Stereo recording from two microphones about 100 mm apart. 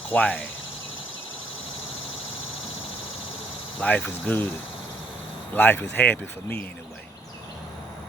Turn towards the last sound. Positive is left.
turn(degrees=15)  # may be behind; listen again after turning